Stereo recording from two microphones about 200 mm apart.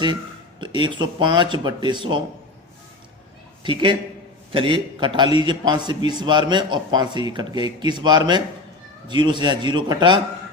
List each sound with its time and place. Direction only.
0.6 s a man's voice: 25° right (ahead or behind)
3.6 s a man's voice: 25° right (ahead or behind)